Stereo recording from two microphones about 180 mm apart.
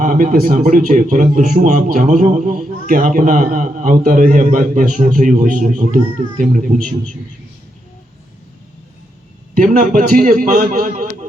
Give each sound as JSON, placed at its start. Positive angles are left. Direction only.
{"t": 0.0, "sound": "a man's voice", "side_deg": -45}
{"t": 9.6, "sound": "a man's voice", "side_deg": -50}